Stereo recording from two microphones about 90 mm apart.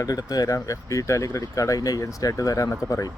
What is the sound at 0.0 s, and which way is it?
Speech, 45° left (ahead or behind).